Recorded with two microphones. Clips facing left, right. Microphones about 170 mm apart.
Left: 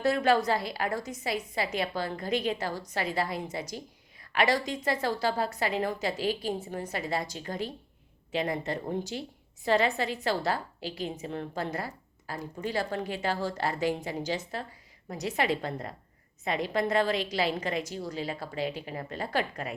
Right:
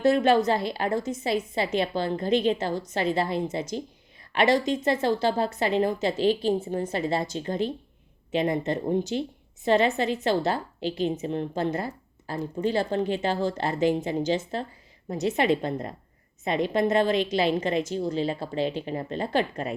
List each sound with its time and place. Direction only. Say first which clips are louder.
0.0 s a woman's voice: right 5 dB; 20° right (ahead or behind)